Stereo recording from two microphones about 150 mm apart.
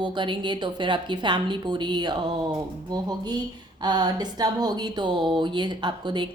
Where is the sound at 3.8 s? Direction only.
25° right (ahead or behind).